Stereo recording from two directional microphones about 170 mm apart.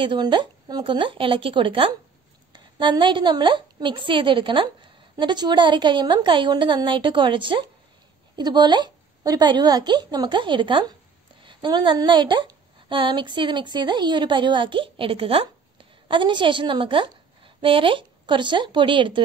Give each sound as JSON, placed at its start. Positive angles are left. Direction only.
{"t": 0.0, "sound": "a woman's voice", "side_deg": -30}